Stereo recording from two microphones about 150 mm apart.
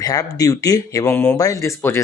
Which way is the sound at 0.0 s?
25° left (ahead or behind).